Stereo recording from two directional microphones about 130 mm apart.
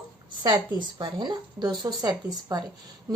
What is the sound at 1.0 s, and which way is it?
A woman's voice, 35° right (ahead or behind).